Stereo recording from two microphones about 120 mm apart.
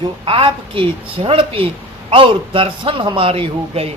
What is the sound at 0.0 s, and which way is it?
A woman's voice, 50° right (ahead or behind).